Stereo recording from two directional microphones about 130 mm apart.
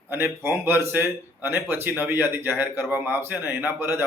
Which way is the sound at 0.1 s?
20° right (ahead or behind).